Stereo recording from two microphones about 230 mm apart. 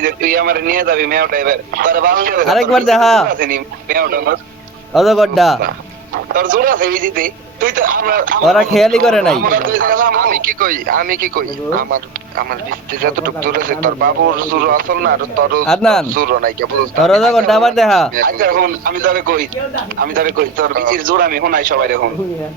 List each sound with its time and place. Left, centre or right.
0.0 s speech: right
2.5 s speech: centre
3.2 s speech: right
4.9 s speech: centre
6.3 s speech: right
8.4 s speech: centre
9.4 s speech: right
15.6 s speech: centre
16.1 s speech: right
17.0 s speech: centre
18.1 s speech: right